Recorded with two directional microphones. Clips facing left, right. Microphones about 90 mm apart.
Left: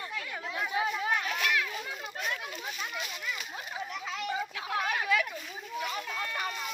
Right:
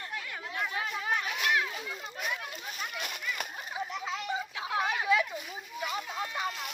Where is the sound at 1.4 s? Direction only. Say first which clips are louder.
Right 1 dB; 25° right (ahead or behind).